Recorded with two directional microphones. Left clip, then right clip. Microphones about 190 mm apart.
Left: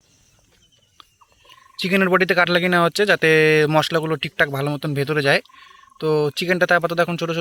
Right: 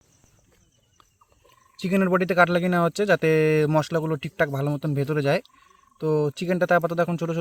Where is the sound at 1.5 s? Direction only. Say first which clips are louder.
Left 6 dB; 5° right (ahead or behind).